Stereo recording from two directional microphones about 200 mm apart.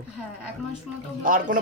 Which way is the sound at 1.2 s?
40° right (ahead or behind).